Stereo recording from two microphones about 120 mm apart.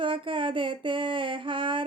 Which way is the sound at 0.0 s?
45° right (ahead or behind).